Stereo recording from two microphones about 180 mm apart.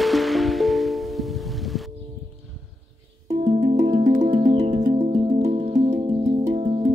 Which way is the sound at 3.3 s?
40° right (ahead or behind).